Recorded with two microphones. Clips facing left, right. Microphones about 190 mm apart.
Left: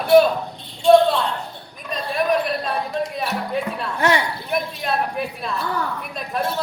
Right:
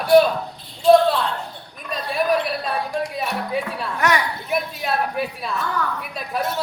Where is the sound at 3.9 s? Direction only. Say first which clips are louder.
Left 1 dB; 30° left (ahead or behind).